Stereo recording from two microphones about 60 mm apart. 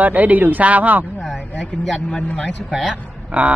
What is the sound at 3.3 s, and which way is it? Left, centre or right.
Speech, right.